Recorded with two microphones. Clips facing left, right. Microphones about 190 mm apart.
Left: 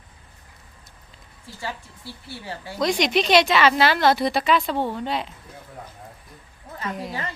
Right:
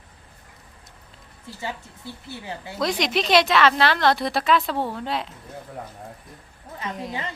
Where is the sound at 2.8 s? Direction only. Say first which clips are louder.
Left 3 dB; centre (ahead or behind).